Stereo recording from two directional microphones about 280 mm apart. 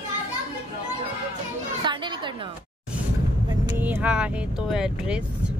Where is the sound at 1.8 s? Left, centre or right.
Centre.